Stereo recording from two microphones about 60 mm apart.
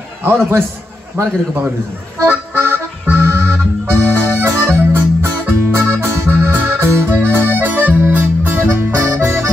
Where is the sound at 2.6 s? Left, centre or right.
Right.